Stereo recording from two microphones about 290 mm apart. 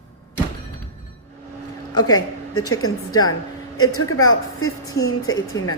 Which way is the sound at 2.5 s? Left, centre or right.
Left.